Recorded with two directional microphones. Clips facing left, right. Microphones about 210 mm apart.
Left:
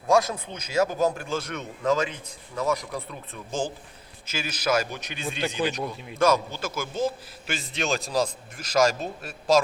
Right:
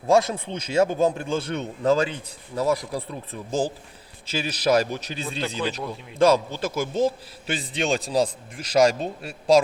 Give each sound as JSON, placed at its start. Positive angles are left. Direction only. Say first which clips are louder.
{"t": 0.1, "sound": "a man's voice", "louder": "right 2 dB", "side_deg": -30}
{"t": 5.6, "sound": "a man's voice", "louder": "left 2 dB", "side_deg": 30}
{"t": 6.1, "sound": "a man's voice", "louder": "right 4 dB", "side_deg": -30}